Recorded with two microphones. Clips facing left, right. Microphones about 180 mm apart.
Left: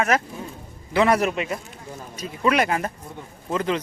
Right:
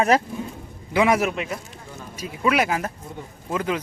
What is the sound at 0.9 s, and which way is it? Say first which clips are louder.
Speech: even; 10° right (ahead or behind).